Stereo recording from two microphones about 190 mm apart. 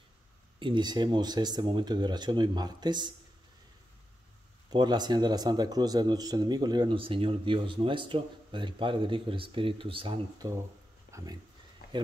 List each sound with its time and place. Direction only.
0.6 s a man's voice: 25° right (ahead or behind)
4.6 s a man's voice: 20° right (ahead or behind)
11.1 s a sound: 15° right (ahead or behind)